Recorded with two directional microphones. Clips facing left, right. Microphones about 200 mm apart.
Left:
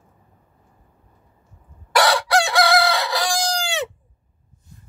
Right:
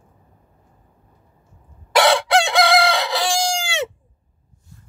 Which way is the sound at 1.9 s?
25° right (ahead or behind).